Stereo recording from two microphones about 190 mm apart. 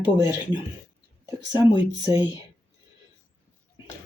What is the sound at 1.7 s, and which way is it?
Speech, 25° left (ahead or behind).